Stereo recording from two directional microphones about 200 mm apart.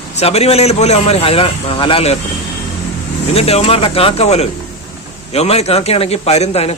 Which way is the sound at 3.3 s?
30° left (ahead or behind).